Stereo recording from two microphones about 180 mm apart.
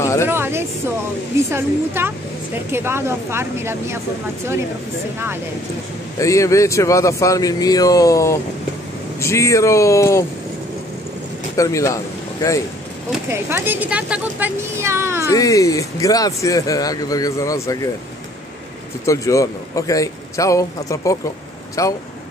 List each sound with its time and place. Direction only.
0.0 s a sound: 15° left (ahead or behind)
0.3 s a sound: 15° right (ahead or behind)
1.5 s speech: 15° right (ahead or behind)
6.1 s a man's voice: 15° left (ahead or behind)
11.5 s speech: 15° left (ahead or behind)
13.3 s speech: 10° right (ahead or behind)
15.3 s speech: 20° left (ahead or behind)
19.0 s a man's voice: 20° left (ahead or behind)